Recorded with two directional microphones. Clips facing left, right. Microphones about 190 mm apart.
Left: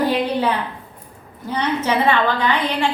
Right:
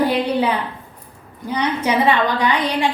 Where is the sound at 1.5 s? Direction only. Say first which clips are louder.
Right 1 dB; 15° right (ahead or behind).